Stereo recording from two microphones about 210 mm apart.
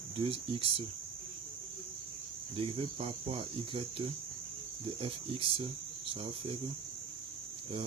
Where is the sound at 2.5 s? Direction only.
25° right (ahead or behind).